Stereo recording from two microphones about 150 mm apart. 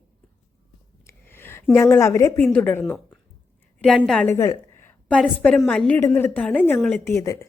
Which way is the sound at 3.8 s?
Centre (ahead or behind).